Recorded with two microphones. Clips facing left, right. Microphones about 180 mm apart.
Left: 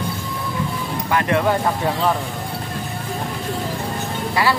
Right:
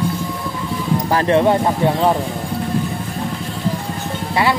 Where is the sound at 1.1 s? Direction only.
30° right (ahead or behind).